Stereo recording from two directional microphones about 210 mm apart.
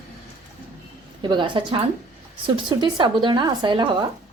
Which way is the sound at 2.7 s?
20° right (ahead or behind).